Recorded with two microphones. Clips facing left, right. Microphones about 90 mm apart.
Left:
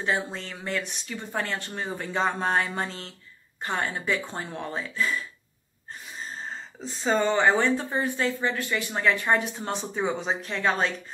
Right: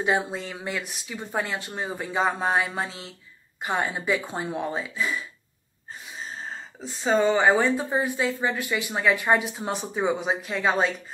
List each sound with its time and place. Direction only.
0.0 s speech: 15° right (ahead or behind)
6.2 s speech: 5° right (ahead or behind)